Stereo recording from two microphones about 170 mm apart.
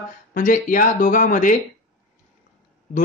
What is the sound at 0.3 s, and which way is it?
A man's voice, 50° left (ahead or behind).